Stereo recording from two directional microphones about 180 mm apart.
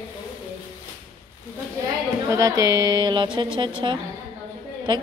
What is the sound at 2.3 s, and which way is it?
A woman's voice, 20° right (ahead or behind).